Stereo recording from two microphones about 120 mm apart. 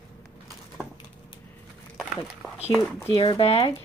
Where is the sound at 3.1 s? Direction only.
45° left (ahead or behind).